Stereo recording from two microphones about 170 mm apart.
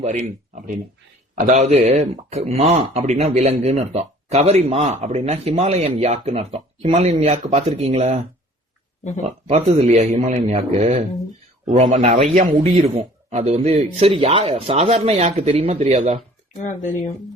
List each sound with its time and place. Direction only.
0.0 s speech: 45° right (ahead or behind)
9.2 s speech: 45° right (ahead or behind)